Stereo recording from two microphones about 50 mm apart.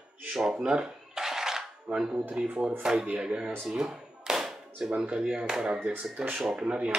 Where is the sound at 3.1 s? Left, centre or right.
Right.